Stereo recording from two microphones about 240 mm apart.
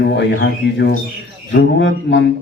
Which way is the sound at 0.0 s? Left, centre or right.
Left.